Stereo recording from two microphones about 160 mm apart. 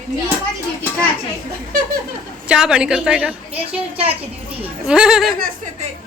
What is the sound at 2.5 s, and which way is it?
A woman's voice, 5° right (ahead or behind).